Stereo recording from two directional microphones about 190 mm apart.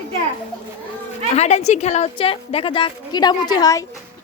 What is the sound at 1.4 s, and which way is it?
A woman's voice, 35° left (ahead or behind).